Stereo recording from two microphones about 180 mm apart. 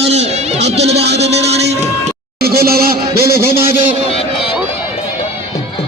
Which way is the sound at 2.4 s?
55° right (ahead or behind).